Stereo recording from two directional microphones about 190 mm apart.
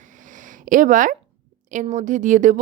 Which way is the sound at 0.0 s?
40° right (ahead or behind).